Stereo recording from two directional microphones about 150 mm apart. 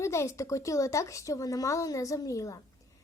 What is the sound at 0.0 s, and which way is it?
A woman's voice, 20° left (ahead or behind).